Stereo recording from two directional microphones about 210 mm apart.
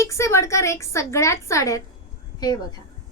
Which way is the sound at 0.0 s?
15° left (ahead or behind).